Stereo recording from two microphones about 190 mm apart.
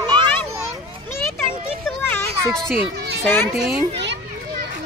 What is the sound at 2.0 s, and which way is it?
Children playing, 5° left (ahead or behind).